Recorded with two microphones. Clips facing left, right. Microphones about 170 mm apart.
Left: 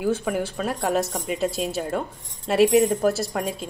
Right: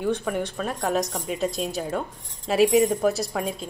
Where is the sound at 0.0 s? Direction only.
5° left (ahead or behind).